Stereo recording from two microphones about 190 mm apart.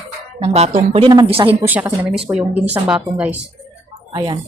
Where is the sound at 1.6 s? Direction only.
10° right (ahead or behind).